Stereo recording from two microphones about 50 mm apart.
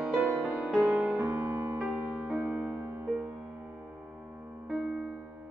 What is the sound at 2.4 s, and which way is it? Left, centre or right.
Music, right.